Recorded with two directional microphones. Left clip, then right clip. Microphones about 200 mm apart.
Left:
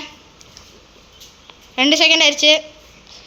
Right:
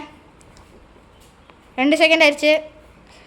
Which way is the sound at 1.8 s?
5° right (ahead or behind).